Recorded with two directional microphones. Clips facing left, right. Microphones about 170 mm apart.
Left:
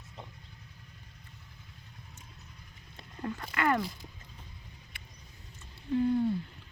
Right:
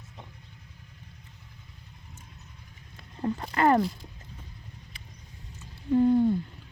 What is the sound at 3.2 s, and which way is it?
Speech, 30° right (ahead or behind).